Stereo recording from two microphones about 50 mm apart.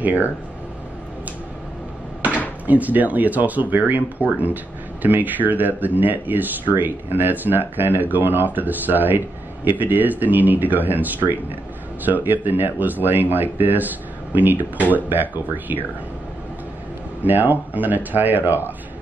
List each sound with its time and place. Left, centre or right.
0.0 s speech: right
2.6 s speech: right
17.2 s speech: right